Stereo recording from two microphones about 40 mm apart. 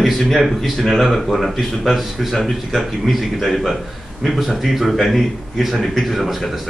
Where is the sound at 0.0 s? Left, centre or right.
Centre.